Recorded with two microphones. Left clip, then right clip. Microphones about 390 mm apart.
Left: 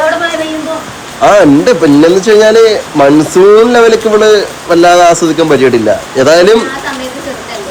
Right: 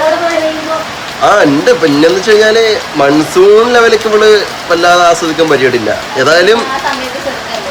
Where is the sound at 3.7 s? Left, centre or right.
Centre.